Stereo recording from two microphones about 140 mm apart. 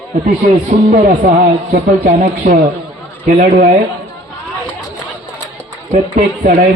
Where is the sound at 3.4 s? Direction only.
65° right (ahead or behind).